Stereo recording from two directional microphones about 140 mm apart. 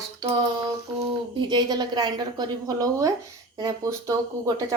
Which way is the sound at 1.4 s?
30° right (ahead or behind).